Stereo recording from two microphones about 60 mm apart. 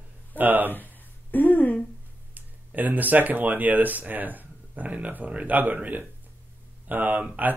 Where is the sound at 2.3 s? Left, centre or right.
Right.